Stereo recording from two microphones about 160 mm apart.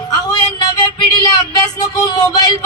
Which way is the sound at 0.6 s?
25° left (ahead or behind).